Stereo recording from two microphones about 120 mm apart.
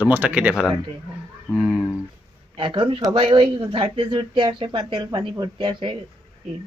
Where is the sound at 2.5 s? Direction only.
40° right (ahead or behind).